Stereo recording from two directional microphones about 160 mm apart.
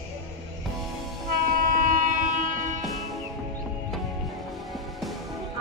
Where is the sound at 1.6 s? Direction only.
55° right (ahead or behind).